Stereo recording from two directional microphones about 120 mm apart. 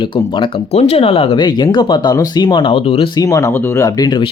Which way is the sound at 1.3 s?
35° left (ahead or behind).